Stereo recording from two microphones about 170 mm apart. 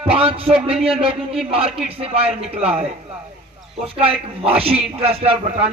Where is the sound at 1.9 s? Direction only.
35° right (ahead or behind).